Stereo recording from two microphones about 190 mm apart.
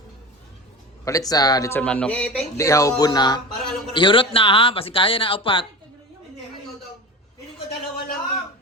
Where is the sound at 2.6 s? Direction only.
15° left (ahead or behind).